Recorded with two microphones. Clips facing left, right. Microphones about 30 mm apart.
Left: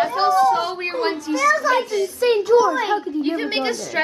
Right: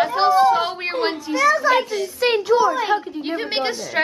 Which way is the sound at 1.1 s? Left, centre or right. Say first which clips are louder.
Even; centre.